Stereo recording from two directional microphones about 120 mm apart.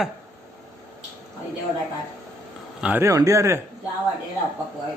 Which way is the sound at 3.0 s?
25° right (ahead or behind).